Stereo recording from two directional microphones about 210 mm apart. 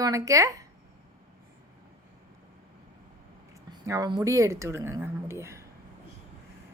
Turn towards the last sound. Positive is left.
turn(degrees=-15)  # may be behind; listen again after turning